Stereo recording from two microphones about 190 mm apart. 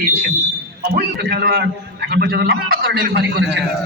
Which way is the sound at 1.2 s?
55° right (ahead or behind).